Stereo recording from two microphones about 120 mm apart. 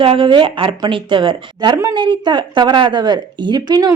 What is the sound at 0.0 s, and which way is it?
Speech, 45° right (ahead or behind).